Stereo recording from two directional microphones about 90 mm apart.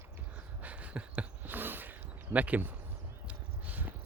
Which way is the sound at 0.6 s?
15° right (ahead or behind).